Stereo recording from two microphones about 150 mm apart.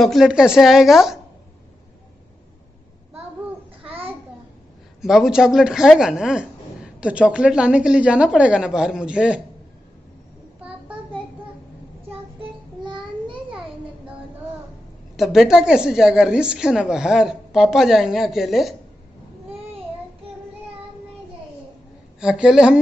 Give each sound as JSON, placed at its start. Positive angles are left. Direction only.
{"t": 0.0, "sound": "speech", "side_deg": 0}
{"t": 3.8, "sound": "babbling", "side_deg": -40}
{"t": 5.0, "sound": "speech", "side_deg": -5}
{"t": 12.8, "sound": "child singing", "side_deg": -30}
{"t": 13.5, "sound": "a sound", "side_deg": -5}
{"t": 15.1, "sound": "speech", "side_deg": 0}
{"t": 22.2, "sound": "speech", "side_deg": -5}